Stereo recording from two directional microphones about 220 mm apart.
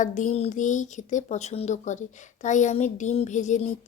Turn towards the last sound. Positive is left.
turn(degrees=35)  # may be behind; listen again after turning